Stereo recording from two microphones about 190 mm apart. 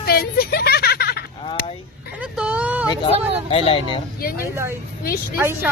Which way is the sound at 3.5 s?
30° left (ahead or behind).